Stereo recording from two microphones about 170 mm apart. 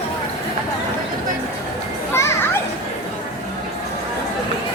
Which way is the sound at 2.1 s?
15° left (ahead or behind).